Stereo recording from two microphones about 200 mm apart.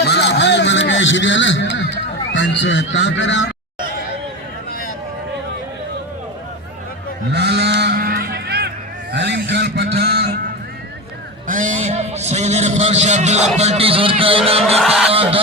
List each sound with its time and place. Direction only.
0.0 s a sound: 55° left (ahead or behind)
2.3 s speech: 65° left (ahead or behind)
7.3 s sheep: 55° right (ahead or behind)
9.1 s honk: 60° right (ahead or behind)
11.4 s a sound: 40° right (ahead or behind)
13.6 s a man's voice: 30° right (ahead or behind)
14.8 s honk: centre (ahead or behind)
15.1 s fowl: 30° right (ahead or behind)